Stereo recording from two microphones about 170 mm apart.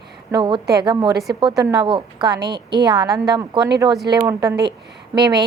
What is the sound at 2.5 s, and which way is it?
Speech, 75° right (ahead or behind).